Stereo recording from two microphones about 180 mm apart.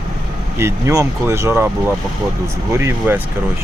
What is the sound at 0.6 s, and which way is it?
Speech, 15° right (ahead or behind).